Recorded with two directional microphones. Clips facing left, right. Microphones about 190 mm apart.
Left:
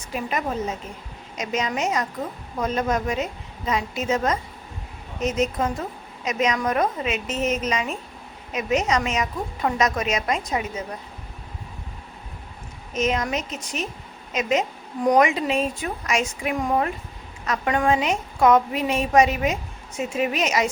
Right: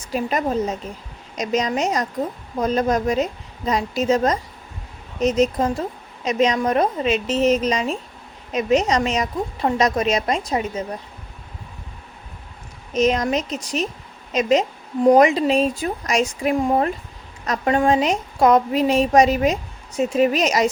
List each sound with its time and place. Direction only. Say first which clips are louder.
0.1 s a woman's voice: right 5 dB; 35° right (ahead or behind)
12.9 s a woman's voice: right 5 dB; 35° right (ahead or behind)